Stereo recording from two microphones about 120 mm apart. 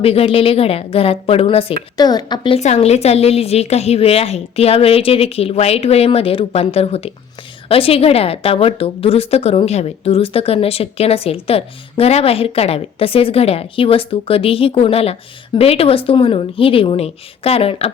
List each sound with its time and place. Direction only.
0.0 s a woman's voice: 55° left (ahead or behind)
2.0 s a woman's voice: 35° left (ahead or behind)
2.6 s a woman's voice: 70° left (ahead or behind)